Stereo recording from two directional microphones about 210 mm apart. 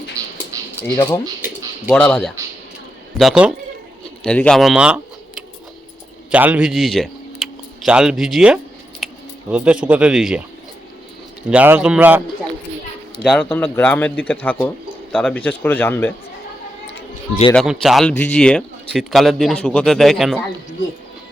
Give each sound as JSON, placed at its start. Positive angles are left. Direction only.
{"t": 0.2, "sound": "a sound", "side_deg": -15}
{"t": 1.9, "sound": "speech", "side_deg": 5}
{"t": 9.0, "sound": "scissors", "side_deg": 0}
{"t": 9.5, "sound": "speech", "side_deg": -5}
{"t": 11.4, "sound": "a man's voice", "side_deg": -5}
{"t": 13.2, "sound": "speech", "side_deg": 5}
{"t": 17.5, "sound": "speech", "side_deg": 0}